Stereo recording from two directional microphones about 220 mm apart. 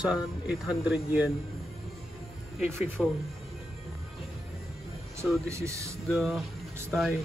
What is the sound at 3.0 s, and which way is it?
Speech, centre (ahead or behind).